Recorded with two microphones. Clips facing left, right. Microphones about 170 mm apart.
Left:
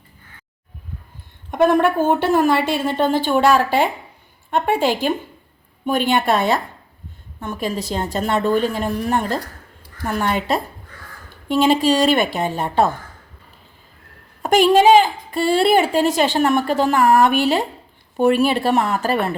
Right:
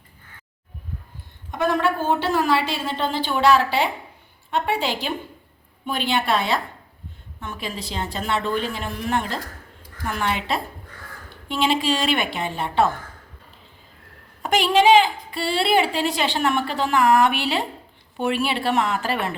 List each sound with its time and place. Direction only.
1.5 s a woman's voice: 55° left (ahead or behind)
14.4 s a woman's voice: 45° left (ahead or behind)